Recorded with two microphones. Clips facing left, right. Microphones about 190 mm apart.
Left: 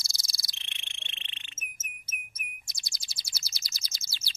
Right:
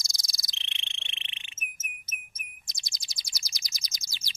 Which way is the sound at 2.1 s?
20° right (ahead or behind).